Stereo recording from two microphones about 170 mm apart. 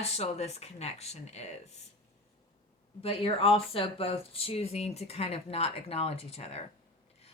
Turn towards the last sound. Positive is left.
turn(degrees=40)  # may be behind; listen again after turning